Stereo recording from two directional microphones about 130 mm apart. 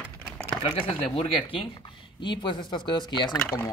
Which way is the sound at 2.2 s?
35° left (ahead or behind).